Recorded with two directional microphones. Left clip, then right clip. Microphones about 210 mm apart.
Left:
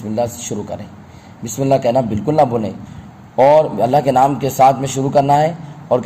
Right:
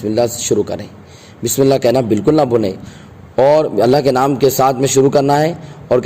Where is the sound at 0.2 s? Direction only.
55° right (ahead or behind).